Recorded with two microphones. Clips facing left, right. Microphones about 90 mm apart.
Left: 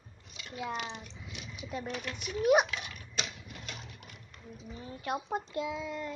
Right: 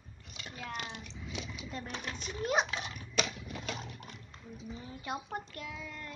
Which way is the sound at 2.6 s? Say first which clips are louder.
Right 1 dB; 30° right (ahead or behind).